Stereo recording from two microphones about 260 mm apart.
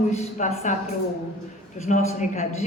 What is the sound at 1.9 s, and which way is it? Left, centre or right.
Speech, left.